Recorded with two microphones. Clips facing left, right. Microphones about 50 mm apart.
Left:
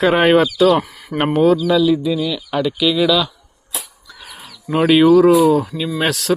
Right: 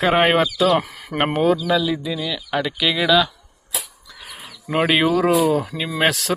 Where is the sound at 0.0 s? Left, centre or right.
Centre.